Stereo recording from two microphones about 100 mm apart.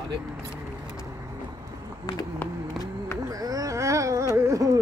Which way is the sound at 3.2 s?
35° right (ahead or behind).